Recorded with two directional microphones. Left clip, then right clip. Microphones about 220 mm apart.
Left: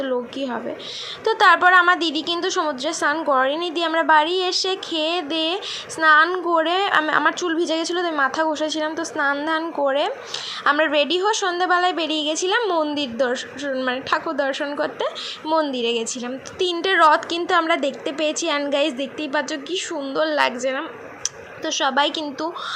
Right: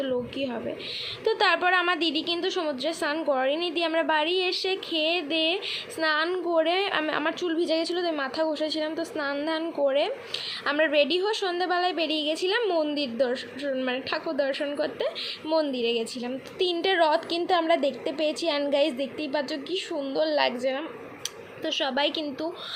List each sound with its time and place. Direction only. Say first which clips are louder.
0.0 s a woman's voice: left 4 dB; 10° left (ahead or behind)